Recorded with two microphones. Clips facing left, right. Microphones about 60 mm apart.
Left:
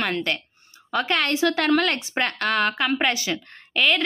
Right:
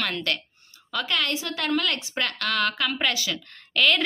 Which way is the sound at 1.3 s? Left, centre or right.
Left.